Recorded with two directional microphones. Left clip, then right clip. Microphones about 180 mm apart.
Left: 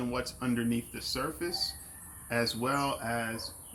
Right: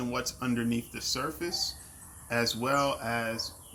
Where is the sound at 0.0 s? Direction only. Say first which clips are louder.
Right 1 dB; 20° right (ahead or behind).